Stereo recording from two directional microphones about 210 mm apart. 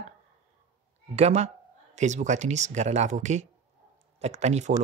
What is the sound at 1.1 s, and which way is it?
Speech, 30° right (ahead or behind).